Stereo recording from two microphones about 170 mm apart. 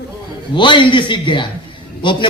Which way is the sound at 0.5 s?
30° left (ahead or behind).